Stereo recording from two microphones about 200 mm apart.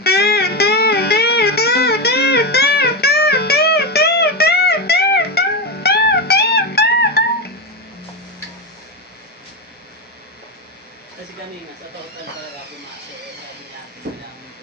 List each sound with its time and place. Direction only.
0.0 s music: 55° left (ahead or behind)